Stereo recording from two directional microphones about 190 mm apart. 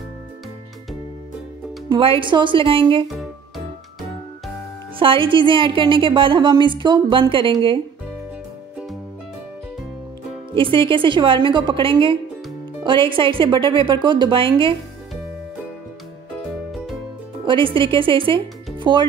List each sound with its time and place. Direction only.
1.9 s a woman's voice: 25° right (ahead or behind)
3.1 s music: centre (ahead or behind)
4.9 s a woman's voice: 25° right (ahead or behind)
10.5 s a woman's voice: 25° right (ahead or behind)
17.5 s speech: 25° right (ahead or behind)